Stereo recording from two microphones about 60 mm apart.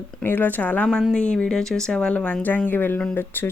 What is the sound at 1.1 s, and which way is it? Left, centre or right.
Speech, centre.